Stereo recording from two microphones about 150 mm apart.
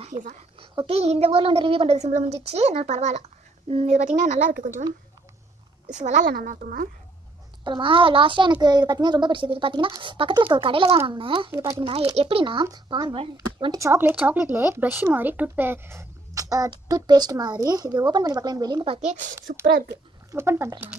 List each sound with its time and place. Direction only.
0.0 s a child's voice: 55° right (ahead or behind)
0.8 s a woman's voice: 40° right (ahead or behind)
5.9 s speech: 55° right (ahead or behind); by 6.9 s 70° right (ahead or behind)
7.6 s a child's voice: 35° right (ahead or behind)
11.5 s speech: 20° right (ahead or behind)
11.8 s a child's voice: 35° right (ahead or behind)
13.7 s speech: 20° right (ahead or behind)
19.0 s speech: 55° right (ahead or behind)
19.6 s a child's voice: 90° right
20.2 s speech: 15° right (ahead or behind)